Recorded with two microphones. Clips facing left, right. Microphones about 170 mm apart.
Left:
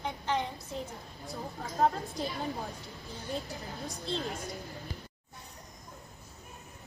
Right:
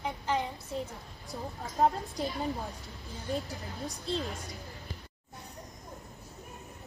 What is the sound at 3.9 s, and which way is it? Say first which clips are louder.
Speech: right 2 dB; 40° right (ahead or behind).